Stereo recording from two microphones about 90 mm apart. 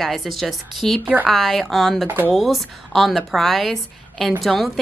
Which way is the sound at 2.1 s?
20° right (ahead or behind).